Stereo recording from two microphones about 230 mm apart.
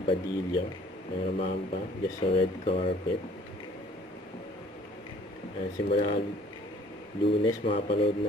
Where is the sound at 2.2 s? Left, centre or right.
Left.